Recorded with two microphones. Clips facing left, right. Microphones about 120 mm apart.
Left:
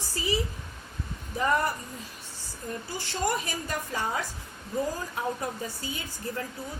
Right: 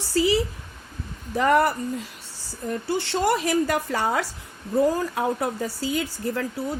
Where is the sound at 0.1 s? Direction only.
90° right.